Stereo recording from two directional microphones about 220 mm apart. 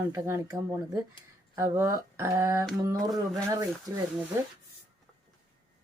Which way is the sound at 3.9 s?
15° right (ahead or behind).